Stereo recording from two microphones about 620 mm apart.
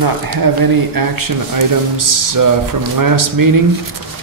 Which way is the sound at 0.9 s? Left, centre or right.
Right.